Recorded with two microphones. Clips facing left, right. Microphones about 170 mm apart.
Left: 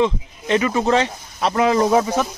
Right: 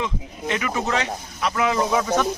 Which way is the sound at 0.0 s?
30° left (ahead or behind).